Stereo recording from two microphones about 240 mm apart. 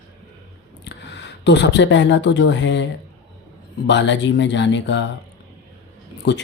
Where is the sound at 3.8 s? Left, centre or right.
Left.